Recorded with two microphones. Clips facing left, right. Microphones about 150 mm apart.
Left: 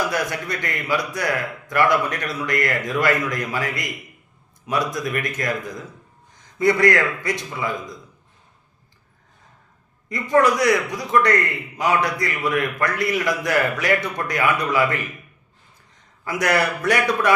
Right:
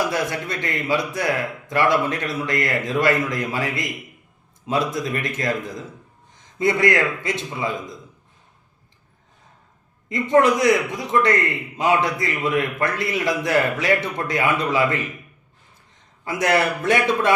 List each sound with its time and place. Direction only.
0.1 s a man's voice: 25° right (ahead or behind)
10.1 s a man's voice: 20° right (ahead or behind)
16.2 s a man's voice: 25° right (ahead or behind)